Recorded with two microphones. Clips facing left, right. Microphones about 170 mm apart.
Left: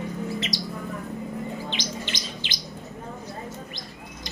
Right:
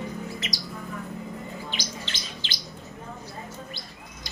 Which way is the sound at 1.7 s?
15° left (ahead or behind).